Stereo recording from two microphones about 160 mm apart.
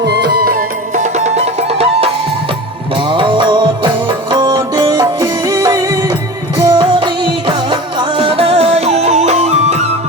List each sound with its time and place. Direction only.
0.0 s music: 90° right; by 2.0 s 40° right (ahead or behind)
3.1 s music: 30° right (ahead or behind)
6.9 s music: 30° right (ahead or behind)